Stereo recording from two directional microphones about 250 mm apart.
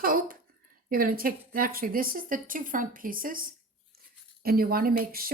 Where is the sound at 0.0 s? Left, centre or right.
Right.